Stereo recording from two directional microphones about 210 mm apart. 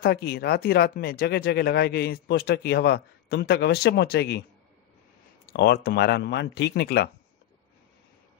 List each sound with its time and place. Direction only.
0.0 s speech: 45° left (ahead or behind)
5.5 s speech: 50° left (ahead or behind)